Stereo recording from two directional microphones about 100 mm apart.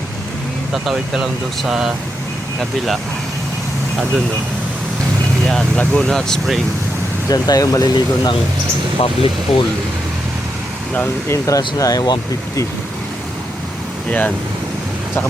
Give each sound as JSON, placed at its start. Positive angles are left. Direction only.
{"t": 0.9, "sound": "speech", "side_deg": -5}
{"t": 5.5, "sound": "speech", "side_deg": 10}
{"t": 7.3, "sound": "speech", "side_deg": 40}
{"t": 9.0, "sound": "speech", "side_deg": 65}
{"t": 10.9, "sound": "speech", "side_deg": 25}
{"t": 14.1, "sound": "speech", "side_deg": 15}